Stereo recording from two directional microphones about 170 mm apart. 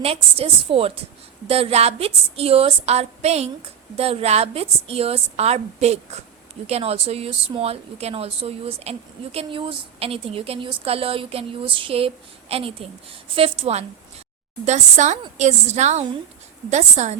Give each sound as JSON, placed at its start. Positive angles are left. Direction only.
{"t": 0.0, "sound": "a woman's voice", "side_deg": -35}